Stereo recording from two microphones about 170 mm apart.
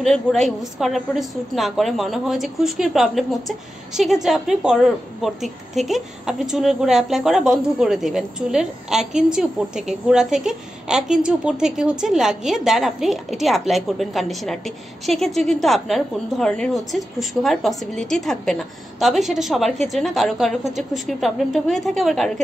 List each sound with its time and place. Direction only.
0.0 s a woman's voice: centre (ahead or behind)